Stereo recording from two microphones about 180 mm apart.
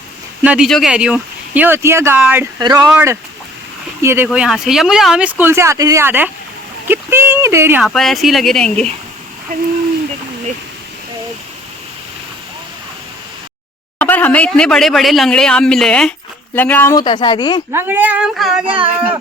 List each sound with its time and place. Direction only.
0.4 s speech: 5° right (ahead or behind)
2.6 s speech: 20° right (ahead or behind)
4.3 s speech: centre (ahead or behind)
7.8 s speech: centre (ahead or behind)
14.0 s speech: 10° left (ahead or behind)
17.0 s speech: 25° left (ahead or behind)
17.7 s speech: 10° right (ahead or behind)
18.6 s speech: 30° right (ahead or behind)